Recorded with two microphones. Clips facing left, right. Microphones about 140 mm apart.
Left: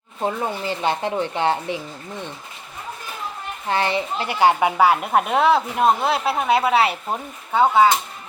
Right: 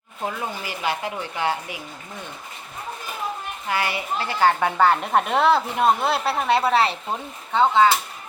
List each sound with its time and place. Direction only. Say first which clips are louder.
0.2 s speech: left 5 dB; 25° left (ahead or behind)
3.7 s speech: left 4 dB; 25° left (ahead or behind); by 7.9 s 10° left (ahead or behind)